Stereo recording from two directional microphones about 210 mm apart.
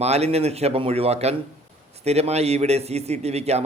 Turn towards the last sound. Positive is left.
turn(degrees=-30)  # may be behind; listen again after turning